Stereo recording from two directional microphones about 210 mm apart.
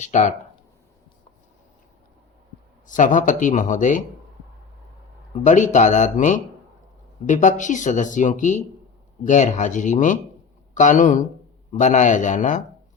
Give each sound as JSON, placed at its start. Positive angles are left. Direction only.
{"t": 0.0, "sound": "speech", "side_deg": 35}
{"t": 2.8, "sound": "speech", "side_deg": 40}
{"t": 5.3, "sound": "speech", "side_deg": 35}